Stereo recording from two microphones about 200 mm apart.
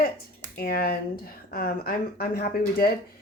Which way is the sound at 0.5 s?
50° left (ahead or behind).